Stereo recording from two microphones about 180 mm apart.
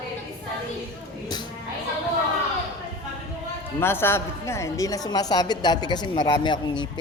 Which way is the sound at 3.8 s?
15° left (ahead or behind).